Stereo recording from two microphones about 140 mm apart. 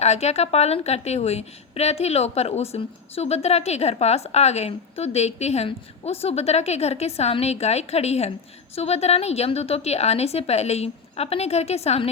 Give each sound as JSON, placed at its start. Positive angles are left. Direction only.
{"t": 0.0, "sound": "a woman's voice", "side_deg": 50}